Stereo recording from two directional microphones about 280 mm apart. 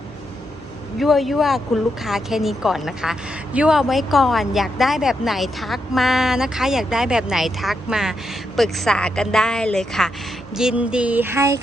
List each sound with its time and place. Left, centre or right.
0.9 s speech: centre